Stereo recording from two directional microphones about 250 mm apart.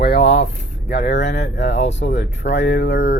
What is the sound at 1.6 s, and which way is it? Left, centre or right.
Speech, left.